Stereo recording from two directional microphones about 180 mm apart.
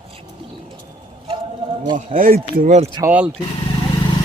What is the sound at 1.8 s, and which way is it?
Speech, 25° right (ahead or behind).